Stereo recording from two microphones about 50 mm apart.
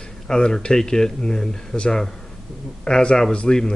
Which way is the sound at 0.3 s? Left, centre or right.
Centre.